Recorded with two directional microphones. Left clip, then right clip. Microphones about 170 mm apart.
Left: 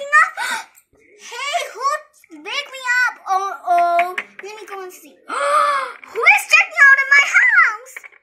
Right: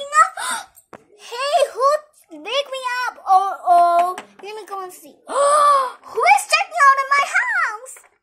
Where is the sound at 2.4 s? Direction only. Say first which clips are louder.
Even; 45° right (ahead or behind).